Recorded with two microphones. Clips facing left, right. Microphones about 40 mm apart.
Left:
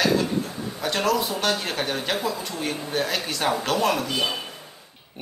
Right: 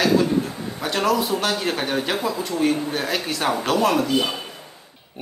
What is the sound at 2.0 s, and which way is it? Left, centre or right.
Speech, centre.